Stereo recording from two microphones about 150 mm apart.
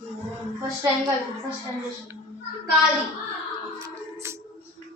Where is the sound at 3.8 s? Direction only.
20° right (ahead or behind).